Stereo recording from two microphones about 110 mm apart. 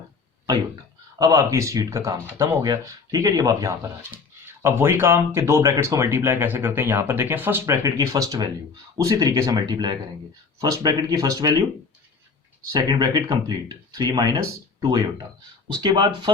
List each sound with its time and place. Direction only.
1.2 s speech: 30° right (ahead or behind)
4.6 s speech: 20° right (ahead or behind)
7.7 s speech: 35° right (ahead or behind)
9.6 s speech: 40° right (ahead or behind)
12.7 s speech: 40° right (ahead or behind)